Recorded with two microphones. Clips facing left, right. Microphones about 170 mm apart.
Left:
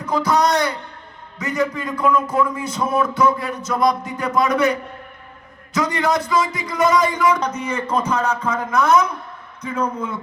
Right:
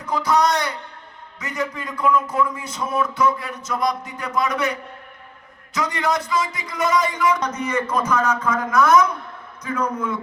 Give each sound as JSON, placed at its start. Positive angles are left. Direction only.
{"t": 0.1, "sound": "a man's voice", "side_deg": 35}